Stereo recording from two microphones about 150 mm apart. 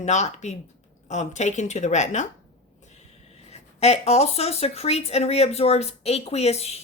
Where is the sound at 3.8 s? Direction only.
45° left (ahead or behind).